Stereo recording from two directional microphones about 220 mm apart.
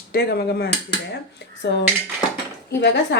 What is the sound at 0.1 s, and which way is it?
Speech, 45° left (ahead or behind).